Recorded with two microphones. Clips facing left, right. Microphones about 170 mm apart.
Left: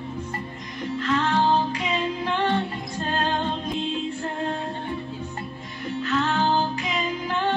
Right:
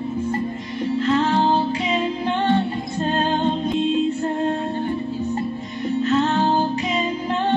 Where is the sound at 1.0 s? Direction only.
30° right (ahead or behind).